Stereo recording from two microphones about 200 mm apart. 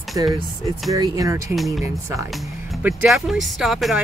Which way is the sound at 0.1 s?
20° right (ahead or behind).